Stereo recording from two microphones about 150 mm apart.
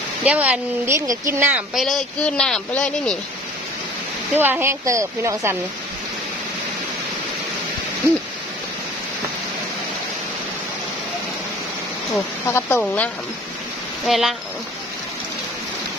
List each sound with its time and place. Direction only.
0.2 s speech: 10° right (ahead or behind)
1.5 s speech: centre (ahead or behind)
4.4 s speech: 15° right (ahead or behind)
12.4 s speech: 15° left (ahead or behind)
14.0 s speech: centre (ahead or behind)